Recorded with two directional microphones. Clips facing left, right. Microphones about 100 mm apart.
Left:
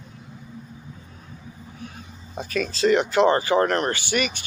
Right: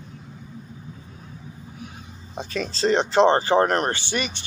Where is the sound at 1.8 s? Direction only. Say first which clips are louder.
Left 1 dB; 15° right (ahead or behind).